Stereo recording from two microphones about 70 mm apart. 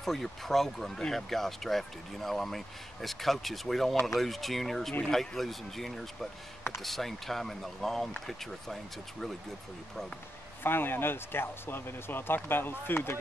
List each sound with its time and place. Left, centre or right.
0.0 s speech: centre
10.6 s speech: left